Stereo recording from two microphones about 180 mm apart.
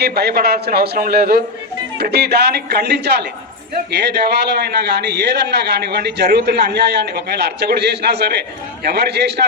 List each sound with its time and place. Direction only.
0.0 s a man's voice: 65° right (ahead or behind)